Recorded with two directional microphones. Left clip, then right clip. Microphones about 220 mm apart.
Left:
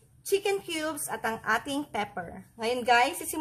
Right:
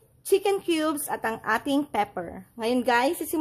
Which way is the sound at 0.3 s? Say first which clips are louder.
Right 5 dB; 35° right (ahead or behind).